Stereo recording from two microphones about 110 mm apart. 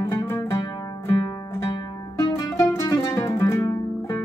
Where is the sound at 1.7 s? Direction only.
40° left (ahead or behind).